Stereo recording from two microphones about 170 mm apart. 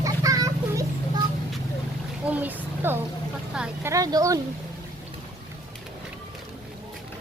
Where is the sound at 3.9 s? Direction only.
20° right (ahead or behind).